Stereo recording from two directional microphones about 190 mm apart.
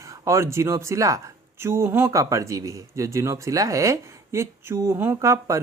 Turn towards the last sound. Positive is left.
turn(degrees=-15)  # may be behind; listen again after turning